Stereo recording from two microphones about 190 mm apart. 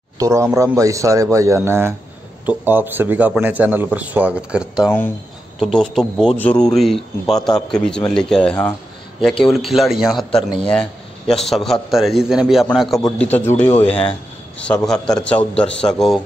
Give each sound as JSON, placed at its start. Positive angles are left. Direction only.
{"t": 0.2, "sound": "speech", "side_deg": -15}